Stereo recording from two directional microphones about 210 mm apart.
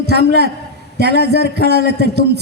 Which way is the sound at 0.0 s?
50° right (ahead or behind).